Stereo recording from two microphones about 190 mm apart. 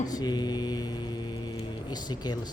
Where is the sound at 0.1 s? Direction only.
20° left (ahead or behind).